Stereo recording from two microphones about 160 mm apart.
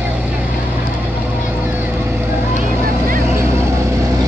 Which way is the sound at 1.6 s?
15° right (ahead or behind).